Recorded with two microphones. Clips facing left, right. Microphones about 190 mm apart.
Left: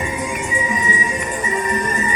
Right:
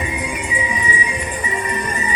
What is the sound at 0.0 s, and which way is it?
Music, 45° left (ahead or behind).